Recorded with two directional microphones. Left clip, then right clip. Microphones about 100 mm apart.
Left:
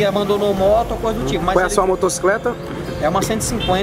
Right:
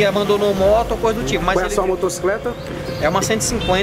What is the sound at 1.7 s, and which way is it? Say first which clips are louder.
Speech: left 2 dB; 20° left (ahead or behind).